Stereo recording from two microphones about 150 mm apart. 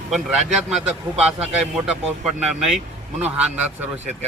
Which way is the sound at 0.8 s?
5° right (ahead or behind).